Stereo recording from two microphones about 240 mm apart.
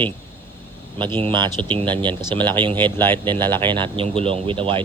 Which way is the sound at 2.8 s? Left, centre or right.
Centre.